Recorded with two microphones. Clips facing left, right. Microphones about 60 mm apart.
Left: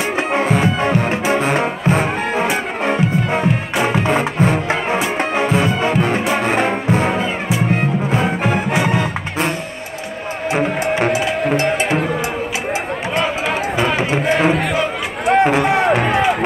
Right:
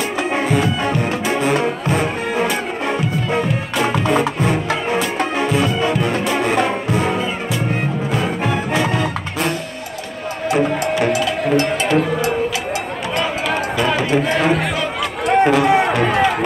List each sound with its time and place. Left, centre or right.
0.3 s music: left
10.5 s music: left
13.7 s run: left
15.4 s music: left